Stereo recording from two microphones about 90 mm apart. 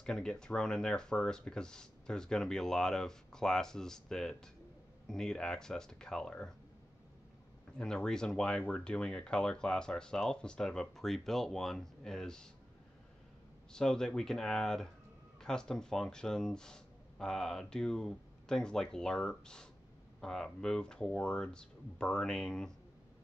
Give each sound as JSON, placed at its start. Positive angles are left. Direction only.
{"t": 0.0, "sound": "speech", "side_deg": 5}
{"t": 7.7, "sound": "speech", "side_deg": 10}
{"t": 13.7, "sound": "speech", "side_deg": 5}